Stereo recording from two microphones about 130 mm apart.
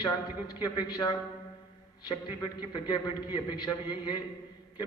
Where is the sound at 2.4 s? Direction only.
35° left (ahead or behind).